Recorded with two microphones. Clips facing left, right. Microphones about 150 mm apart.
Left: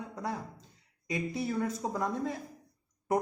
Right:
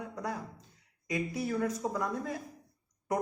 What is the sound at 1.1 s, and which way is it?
Speech, 25° left (ahead or behind).